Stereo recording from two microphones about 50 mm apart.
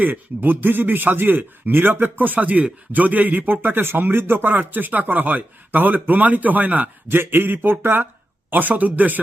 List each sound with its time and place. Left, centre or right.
0.0 s a man's voice: right
7.1 s a man's voice: right